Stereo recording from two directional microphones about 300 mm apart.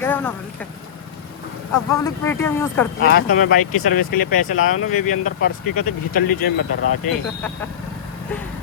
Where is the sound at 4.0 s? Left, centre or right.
Left.